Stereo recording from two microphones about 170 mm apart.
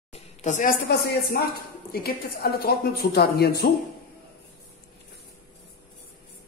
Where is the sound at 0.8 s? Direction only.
65° left (ahead or behind).